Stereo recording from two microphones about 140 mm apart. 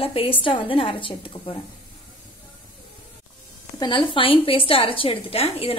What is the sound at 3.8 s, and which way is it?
Speech, 35° left (ahead or behind).